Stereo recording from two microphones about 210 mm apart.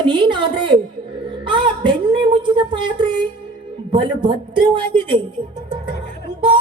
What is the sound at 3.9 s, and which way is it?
A man's voice, 20° right (ahead or behind).